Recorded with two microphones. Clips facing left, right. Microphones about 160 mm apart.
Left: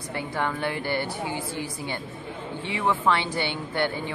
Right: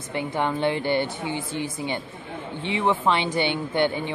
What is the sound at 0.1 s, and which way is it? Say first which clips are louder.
A woman's voice: right 3 dB; 20° right (ahead or behind).